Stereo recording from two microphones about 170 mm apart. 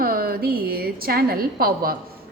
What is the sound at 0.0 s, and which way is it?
A woman's voice, 60° right (ahead or behind).